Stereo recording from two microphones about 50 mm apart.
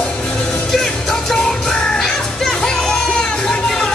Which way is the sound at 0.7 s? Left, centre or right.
Centre.